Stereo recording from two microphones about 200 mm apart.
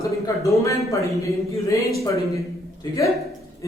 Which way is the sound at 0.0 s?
15° left (ahead or behind).